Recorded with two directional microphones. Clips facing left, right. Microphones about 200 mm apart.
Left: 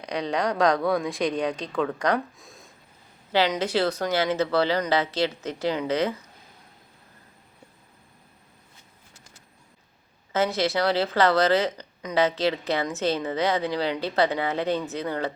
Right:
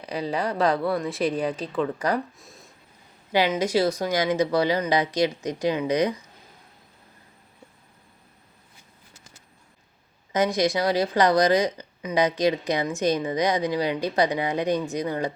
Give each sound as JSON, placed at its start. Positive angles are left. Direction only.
{"t": 0.0, "sound": "speech", "side_deg": -5}
{"t": 3.3, "sound": "speech", "side_deg": -10}
{"t": 10.3, "sound": "speech", "side_deg": -15}